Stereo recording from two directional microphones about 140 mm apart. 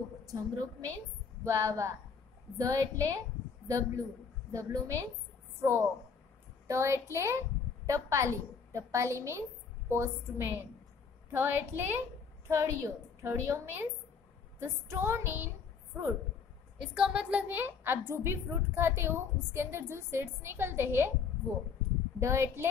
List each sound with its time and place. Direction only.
0.2 s a woman's voice: 25° right (ahead or behind)
16.7 s a woman's voice: 5° right (ahead or behind)
22.2 s a woman's voice: 20° right (ahead or behind)